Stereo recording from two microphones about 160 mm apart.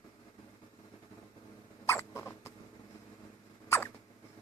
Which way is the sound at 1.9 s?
15° left (ahead or behind).